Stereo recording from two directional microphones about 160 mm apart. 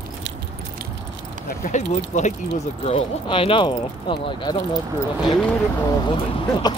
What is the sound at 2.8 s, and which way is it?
Speech, 35° left (ahead or behind).